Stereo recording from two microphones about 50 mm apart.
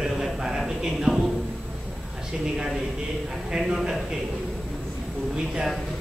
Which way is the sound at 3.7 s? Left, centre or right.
Centre.